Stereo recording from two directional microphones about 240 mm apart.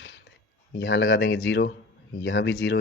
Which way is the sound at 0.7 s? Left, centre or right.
Left.